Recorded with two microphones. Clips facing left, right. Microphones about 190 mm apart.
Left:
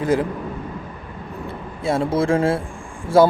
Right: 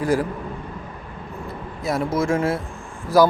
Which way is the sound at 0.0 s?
20° left (ahead or behind).